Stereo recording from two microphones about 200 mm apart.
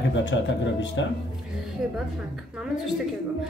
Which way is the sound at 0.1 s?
65° left (ahead or behind).